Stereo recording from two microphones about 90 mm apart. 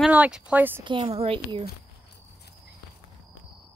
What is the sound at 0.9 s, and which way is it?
Speech, 70° right (ahead or behind).